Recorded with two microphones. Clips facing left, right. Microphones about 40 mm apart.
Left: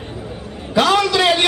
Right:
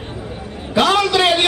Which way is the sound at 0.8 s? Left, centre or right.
Right.